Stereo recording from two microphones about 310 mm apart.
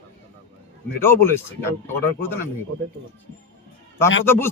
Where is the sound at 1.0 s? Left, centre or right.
Centre.